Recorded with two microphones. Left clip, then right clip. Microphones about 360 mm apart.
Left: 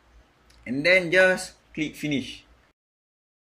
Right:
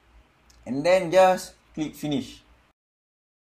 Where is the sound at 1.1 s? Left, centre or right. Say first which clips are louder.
Right 1 dB; right.